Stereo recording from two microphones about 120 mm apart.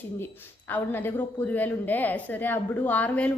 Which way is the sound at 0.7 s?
15° left (ahead or behind).